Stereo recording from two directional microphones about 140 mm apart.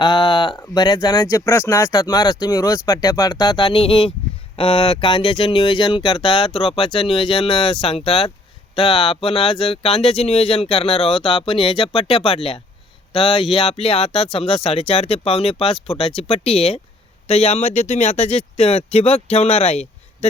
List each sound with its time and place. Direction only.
0.0 s speech: 30° left (ahead or behind); by 19.9 s 50° left (ahead or behind)